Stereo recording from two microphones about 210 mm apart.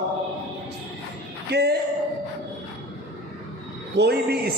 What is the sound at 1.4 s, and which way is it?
Speech, 50° right (ahead or behind).